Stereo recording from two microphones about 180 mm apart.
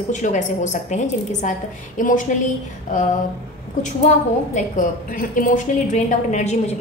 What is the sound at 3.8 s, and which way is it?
A woman's voice, 40° left (ahead or behind).